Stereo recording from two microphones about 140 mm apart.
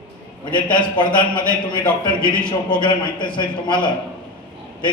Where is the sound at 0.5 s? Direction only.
35° left (ahead or behind).